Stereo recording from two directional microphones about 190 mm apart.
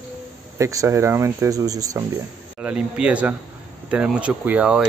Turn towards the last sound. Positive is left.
turn(degrees=-5)  # may be behind; listen again after turning